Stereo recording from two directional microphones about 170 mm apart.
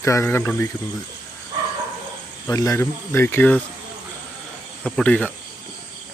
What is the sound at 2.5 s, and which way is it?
Speech, 20° left (ahead or behind).